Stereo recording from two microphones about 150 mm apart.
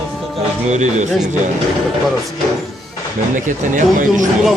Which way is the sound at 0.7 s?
50° right (ahead or behind).